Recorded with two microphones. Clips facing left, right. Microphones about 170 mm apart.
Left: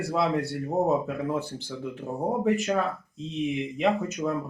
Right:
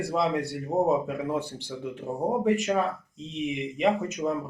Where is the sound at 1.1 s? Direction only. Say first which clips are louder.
Even; 15° right (ahead or behind).